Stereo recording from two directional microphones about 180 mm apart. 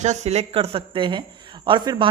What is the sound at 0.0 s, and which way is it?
A woman's voice, 40° right (ahead or behind).